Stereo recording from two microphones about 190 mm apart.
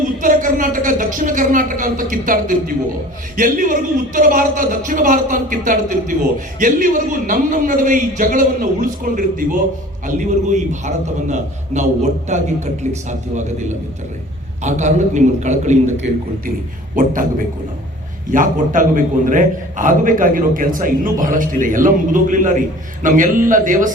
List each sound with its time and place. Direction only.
0.2 s a man's voice: 45° right (ahead or behind)
16.9 s a man's voice: 45° right (ahead or behind)
18.3 s a man's voice: 45° right (ahead or behind)